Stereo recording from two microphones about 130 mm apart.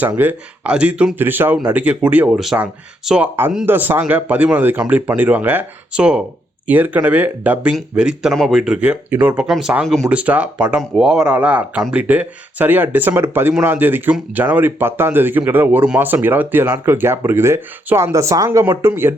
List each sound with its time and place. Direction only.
0.0 s speech: 15° right (ahead or behind)
3.7 s speech: 15° right (ahead or behind); by 10.1 s centre (ahead or behind)
10.1 s speech: 10° right (ahead or behind)